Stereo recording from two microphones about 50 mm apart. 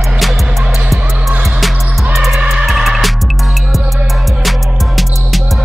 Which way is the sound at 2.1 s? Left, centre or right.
Centre.